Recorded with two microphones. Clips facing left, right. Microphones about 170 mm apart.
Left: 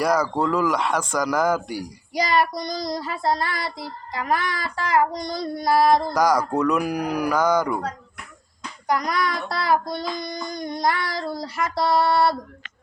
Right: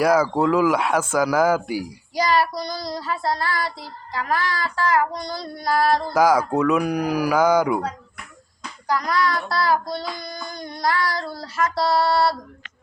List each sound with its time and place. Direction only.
0.0 s speech: 5° right (ahead or behind)
2.4 s child singing: 20° left (ahead or behind)
6.1 s speech: 5° right (ahead or behind)
8.9 s child singing: 20° left (ahead or behind)
10.2 s a sound: 20° left (ahead or behind)